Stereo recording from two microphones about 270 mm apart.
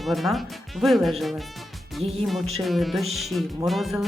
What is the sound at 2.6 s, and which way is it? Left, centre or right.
Speech, centre.